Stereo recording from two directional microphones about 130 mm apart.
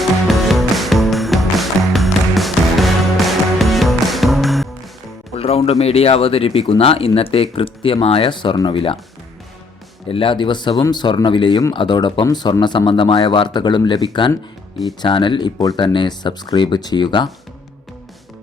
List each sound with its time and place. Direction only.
0.0 s music: centre (ahead or behind)
5.3 s music: 50° left (ahead or behind)
5.8 s speech: 50° left (ahead or behind)
10.1 s speech: 40° left (ahead or behind)